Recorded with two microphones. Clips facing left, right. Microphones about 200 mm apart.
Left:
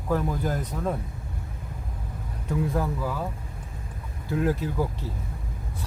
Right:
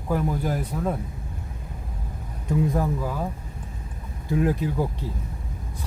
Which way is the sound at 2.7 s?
15° right (ahead or behind).